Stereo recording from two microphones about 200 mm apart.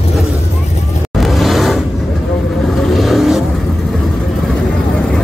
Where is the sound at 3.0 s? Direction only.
Centre (ahead or behind).